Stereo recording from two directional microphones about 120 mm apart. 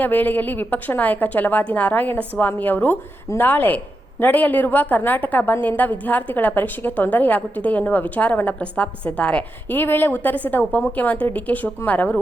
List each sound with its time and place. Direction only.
0.0 s a woman's voice: 15° left (ahead or behind)